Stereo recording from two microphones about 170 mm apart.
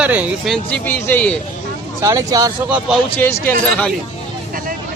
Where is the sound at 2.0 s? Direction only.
20° right (ahead or behind).